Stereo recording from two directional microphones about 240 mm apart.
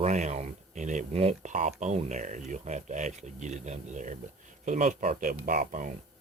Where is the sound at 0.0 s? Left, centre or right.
Right.